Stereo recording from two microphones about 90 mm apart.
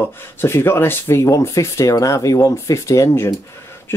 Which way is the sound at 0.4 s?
25° left (ahead or behind).